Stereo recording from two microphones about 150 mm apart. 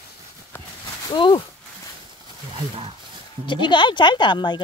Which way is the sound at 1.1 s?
35° left (ahead or behind).